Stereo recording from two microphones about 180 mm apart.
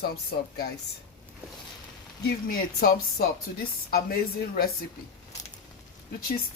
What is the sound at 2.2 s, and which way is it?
Speech, 55° left (ahead or behind).